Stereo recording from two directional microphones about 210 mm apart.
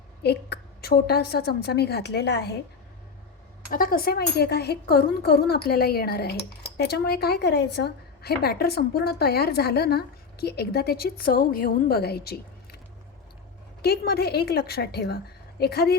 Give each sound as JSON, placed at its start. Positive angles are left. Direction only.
{"t": 0.2, "sound": "speech", "side_deg": 50}
{"t": 3.7, "sound": "speech", "side_deg": 40}
{"t": 13.8, "sound": "speech", "side_deg": 50}